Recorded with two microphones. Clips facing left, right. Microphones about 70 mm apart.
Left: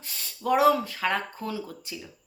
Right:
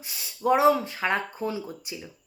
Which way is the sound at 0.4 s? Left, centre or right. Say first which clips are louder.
Right 1 dB; right.